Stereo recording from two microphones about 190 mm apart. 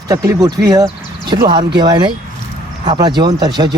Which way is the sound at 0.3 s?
20° right (ahead or behind).